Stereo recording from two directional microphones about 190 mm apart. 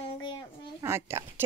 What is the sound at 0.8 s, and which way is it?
Speech, 15° right (ahead or behind).